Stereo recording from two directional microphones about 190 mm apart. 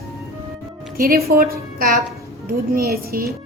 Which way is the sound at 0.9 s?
50° right (ahead or behind).